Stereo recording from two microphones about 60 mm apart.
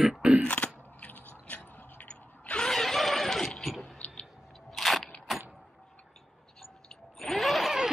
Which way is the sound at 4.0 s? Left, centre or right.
Centre.